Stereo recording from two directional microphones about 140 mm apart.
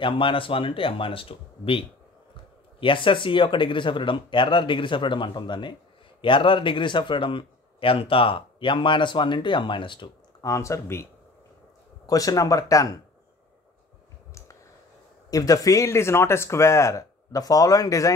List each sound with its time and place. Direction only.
0.0 s a man's voice: 40° left (ahead or behind); by 11.1 s 20° left (ahead or behind)
12.1 s speech: 25° left (ahead or behind)
15.2 s speech: 25° left (ahead or behind)